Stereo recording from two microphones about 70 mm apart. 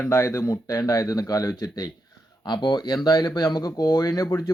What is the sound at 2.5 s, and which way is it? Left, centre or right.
Speech, left.